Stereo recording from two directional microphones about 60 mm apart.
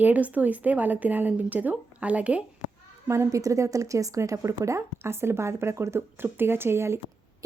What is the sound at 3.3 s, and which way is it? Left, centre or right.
Speech, right.